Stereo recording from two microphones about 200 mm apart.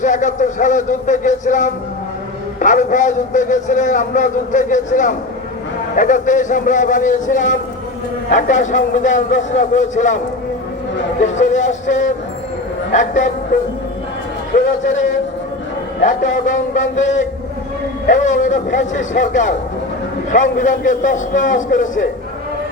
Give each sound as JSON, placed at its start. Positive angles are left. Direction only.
{"t": 0.0, "sound": "a man's voice", "side_deg": 40}
{"t": 10.9, "sound": "speech", "side_deg": 65}
{"t": 11.4, "sound": "a man's voice", "side_deg": 35}
{"t": 14.5, "sound": "a man's voice", "side_deg": 40}
{"t": 16.0, "sound": "a man's voice", "side_deg": 40}